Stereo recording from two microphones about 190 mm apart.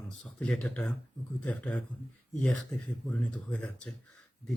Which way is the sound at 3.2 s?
5° left (ahead or behind).